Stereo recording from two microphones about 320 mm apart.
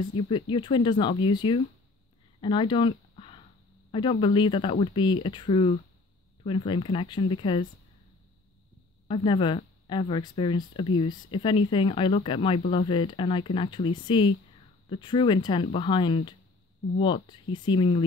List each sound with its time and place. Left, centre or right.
0.3 s speech: centre
9.0 s a woman's voice: centre